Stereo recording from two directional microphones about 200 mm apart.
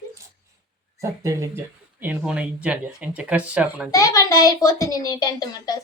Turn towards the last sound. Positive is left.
turn(degrees=20)  # may be behind; listen again after turning